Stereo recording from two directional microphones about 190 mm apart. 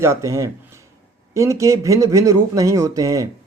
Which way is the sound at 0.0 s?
15° right (ahead or behind).